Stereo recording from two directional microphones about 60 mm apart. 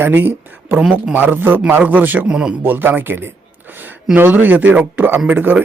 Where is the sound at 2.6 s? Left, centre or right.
Right.